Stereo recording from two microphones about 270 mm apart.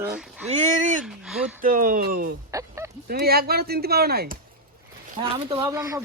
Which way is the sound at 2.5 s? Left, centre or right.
Centre.